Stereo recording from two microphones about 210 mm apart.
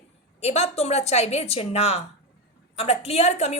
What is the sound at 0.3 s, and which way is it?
A woman's voice, 30° left (ahead or behind).